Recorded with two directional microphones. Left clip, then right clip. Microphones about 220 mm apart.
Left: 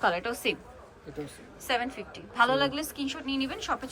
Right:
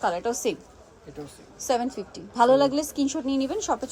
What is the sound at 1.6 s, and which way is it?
A woman's voice, 25° right (ahead or behind).